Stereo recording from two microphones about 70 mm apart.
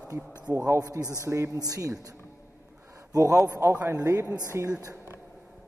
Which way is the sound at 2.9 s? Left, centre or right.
Right.